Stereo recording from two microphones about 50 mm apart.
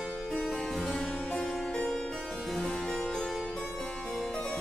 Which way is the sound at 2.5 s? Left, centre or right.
Centre.